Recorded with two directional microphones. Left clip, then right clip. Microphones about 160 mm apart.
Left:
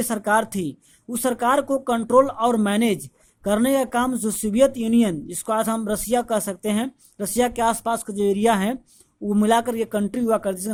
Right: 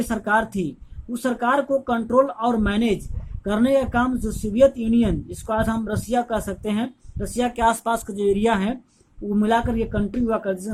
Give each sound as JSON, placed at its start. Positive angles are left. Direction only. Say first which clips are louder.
{"t": 0.0, "sound": "speech", "louder": "left 1 dB", "side_deg": 45}